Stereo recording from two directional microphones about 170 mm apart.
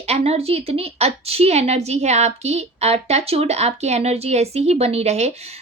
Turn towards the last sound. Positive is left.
turn(degrees=-40)  # may be behind; listen again after turning